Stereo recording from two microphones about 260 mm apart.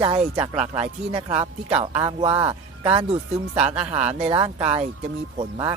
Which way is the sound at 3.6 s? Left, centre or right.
Centre.